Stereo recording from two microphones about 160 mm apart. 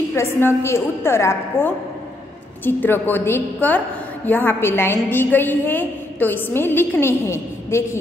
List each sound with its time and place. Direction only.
0.1 s a woman's voice: 15° left (ahead or behind)